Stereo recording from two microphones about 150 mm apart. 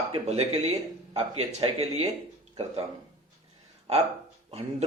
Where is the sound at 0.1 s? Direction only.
45° right (ahead or behind).